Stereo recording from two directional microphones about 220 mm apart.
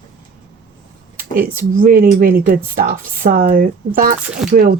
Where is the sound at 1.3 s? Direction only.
40° right (ahead or behind).